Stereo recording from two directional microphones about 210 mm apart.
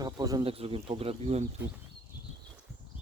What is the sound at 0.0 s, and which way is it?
Speech, 20° right (ahead or behind).